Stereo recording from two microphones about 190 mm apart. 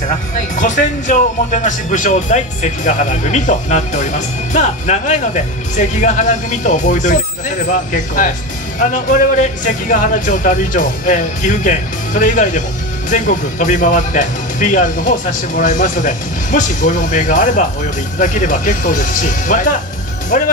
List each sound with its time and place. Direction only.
0.4 s speech: 40° left (ahead or behind)